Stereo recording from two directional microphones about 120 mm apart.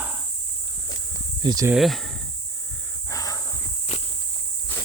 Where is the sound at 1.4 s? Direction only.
35° right (ahead or behind).